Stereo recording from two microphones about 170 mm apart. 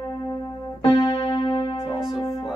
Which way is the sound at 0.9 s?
25° left (ahead or behind).